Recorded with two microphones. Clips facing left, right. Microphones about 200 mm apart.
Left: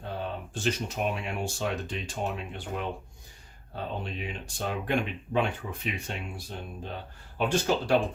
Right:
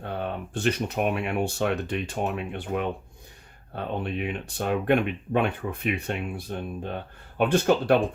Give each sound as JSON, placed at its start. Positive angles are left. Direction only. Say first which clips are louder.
{"t": 0.0, "sound": "speech", "louder": "right 4 dB", "side_deg": -60}